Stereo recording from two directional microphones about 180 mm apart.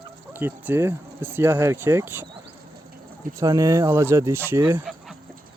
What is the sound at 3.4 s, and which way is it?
Speech, 20° right (ahead or behind).